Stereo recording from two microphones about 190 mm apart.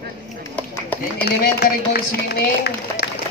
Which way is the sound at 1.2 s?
55° left (ahead or behind).